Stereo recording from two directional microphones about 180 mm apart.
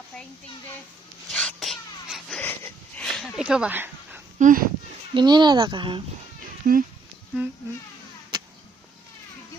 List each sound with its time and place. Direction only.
1.3 s a sound: 5° left (ahead or behind)
2.4 s dog: 10° left (ahead or behind); by 4.2 s 10° right (ahead or behind)
4.4 s speech: 45° right (ahead or behind)
5.1 s speech: 25° right (ahead or behind)
6.6 s speech: 50° right (ahead or behind)
7.4 s speech: 10° right (ahead or behind)